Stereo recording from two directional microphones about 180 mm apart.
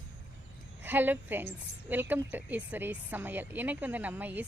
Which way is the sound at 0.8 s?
10° right (ahead or behind).